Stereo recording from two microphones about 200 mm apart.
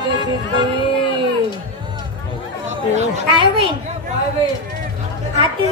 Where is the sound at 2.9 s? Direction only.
30° right (ahead or behind).